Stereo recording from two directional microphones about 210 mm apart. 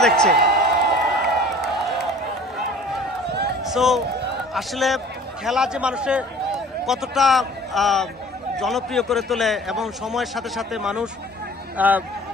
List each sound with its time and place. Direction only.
0.3 s a sound: 50° right (ahead or behind)
3.3 s run: 50° right (ahead or behind)
3.6 s a man's voice: centre (ahead or behind)